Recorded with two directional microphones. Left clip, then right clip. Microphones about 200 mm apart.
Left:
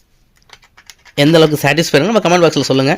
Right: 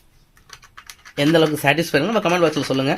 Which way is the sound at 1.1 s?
50° left (ahead or behind).